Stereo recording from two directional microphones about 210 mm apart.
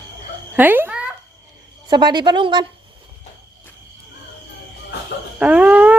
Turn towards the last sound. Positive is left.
turn(degrees=-5)  # may be behind; listen again after turning